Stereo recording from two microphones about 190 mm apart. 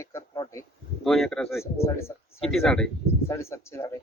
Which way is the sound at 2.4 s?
Centre (ahead or behind).